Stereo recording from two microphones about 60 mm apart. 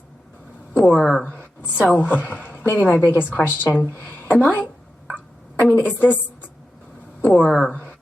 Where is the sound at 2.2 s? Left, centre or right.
Left.